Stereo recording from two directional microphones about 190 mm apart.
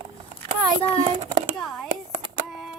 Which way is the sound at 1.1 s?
25° right (ahead or behind).